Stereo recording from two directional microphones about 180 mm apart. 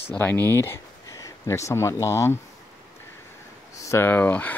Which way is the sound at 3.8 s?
15° left (ahead or behind).